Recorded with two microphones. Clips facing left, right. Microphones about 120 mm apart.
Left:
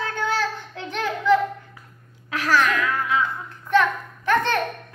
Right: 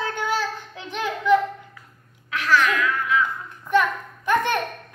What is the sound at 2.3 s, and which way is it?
Speech, 40° left (ahead or behind).